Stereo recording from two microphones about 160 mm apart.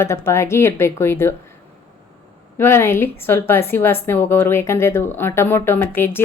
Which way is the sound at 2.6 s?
15° left (ahead or behind).